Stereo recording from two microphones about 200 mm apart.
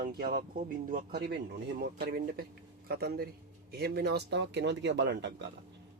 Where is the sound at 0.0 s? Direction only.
50° right (ahead or behind).